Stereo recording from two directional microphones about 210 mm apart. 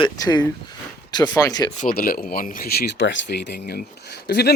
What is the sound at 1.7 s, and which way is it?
Speech, 40° left (ahead or behind).